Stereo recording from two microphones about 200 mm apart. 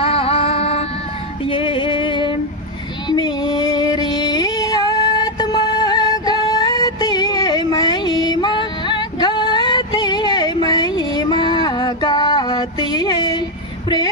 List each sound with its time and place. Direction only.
0.0 s music: 30° left (ahead or behind)
1.4 s female singing: 25° left (ahead or behind)